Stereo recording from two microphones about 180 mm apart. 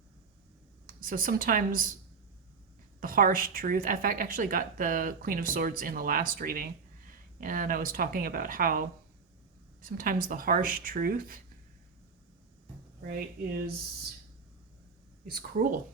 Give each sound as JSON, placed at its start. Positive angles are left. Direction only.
{"t": 0.9, "sound": "speech", "side_deg": -50}
{"t": 3.0, "sound": "a woman's voice", "side_deg": -50}
{"t": 9.8, "sound": "a woman's voice", "side_deg": -50}
{"t": 15.3, "sound": "a woman's voice", "side_deg": -55}